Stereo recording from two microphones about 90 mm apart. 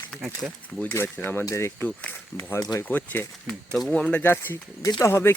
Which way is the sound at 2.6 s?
40° left (ahead or behind).